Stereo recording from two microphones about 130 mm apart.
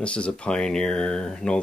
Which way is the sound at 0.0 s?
10° left (ahead or behind).